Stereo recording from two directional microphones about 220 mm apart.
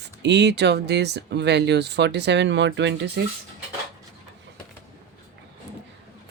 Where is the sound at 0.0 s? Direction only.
50° right (ahead or behind).